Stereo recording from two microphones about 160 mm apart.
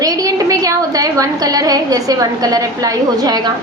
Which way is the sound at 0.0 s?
25° right (ahead or behind).